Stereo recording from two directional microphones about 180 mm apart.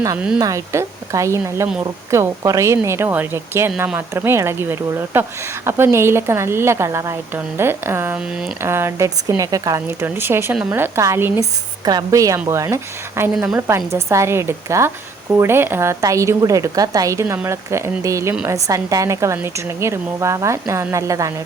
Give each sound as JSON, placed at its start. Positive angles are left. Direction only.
{"t": 0.3, "sound": "a woman's voice", "side_deg": -20}